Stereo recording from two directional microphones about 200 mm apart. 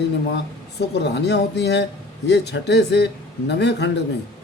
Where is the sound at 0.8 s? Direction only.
55° left (ahead or behind).